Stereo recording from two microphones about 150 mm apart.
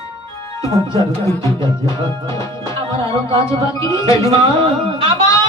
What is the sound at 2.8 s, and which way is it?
Music, 40° right (ahead or behind).